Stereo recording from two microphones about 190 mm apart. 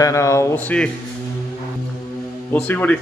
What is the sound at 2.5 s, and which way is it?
Speech, 10° left (ahead or behind).